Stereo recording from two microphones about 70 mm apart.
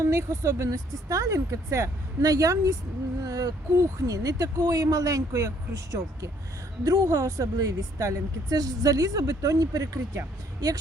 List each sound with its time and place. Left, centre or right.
0.0 s speech: right